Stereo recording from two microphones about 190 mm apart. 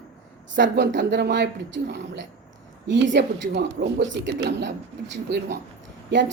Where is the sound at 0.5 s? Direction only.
65° right (ahead or behind).